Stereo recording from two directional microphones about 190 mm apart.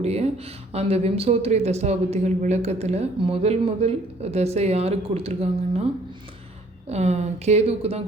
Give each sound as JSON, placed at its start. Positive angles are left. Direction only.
{"t": 0.0, "sound": "speech", "side_deg": -35}
{"t": 6.8, "sound": "speech", "side_deg": -35}